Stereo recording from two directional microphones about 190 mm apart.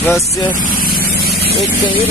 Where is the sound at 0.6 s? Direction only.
50° left (ahead or behind).